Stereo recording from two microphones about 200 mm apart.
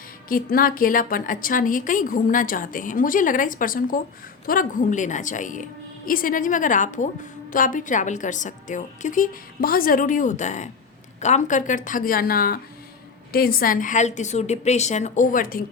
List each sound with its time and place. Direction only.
0.3 s a woman's voice: 45° left (ahead or behind)